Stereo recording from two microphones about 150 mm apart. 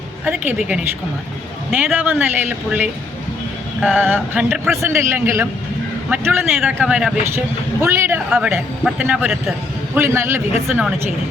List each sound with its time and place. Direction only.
0.3 s speech: 10° right (ahead or behind)
2.0 s speech: 10° right (ahead or behind)
7.3 s speech: 20° right (ahead or behind)
10.7 s a woman's voice: 5° right (ahead or behind)